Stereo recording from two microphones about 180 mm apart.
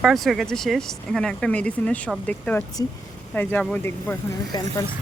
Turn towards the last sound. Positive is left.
turn(degrees=15)  # may be behind; listen again after turning